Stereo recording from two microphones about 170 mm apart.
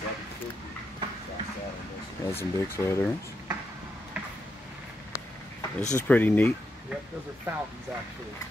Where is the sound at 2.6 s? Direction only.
15° left (ahead or behind).